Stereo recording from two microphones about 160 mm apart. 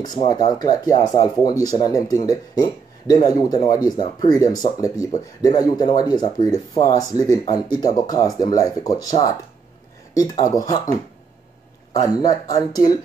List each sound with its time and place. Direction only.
0.0 s speech: 25° left (ahead or behind)
11.9 s speech: 25° left (ahead or behind)